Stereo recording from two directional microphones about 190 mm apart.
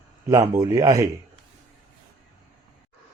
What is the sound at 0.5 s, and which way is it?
Speech, 20° right (ahead or behind).